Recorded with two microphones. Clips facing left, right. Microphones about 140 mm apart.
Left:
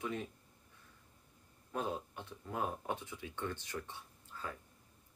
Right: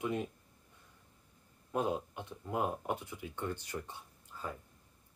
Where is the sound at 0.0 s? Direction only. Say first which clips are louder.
Right 5 dB; 15° right (ahead or behind).